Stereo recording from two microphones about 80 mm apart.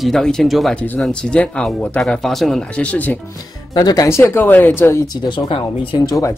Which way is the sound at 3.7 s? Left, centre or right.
Left.